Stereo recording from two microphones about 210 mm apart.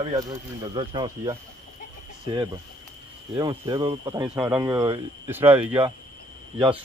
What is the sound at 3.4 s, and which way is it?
Speech, 20° right (ahead or behind).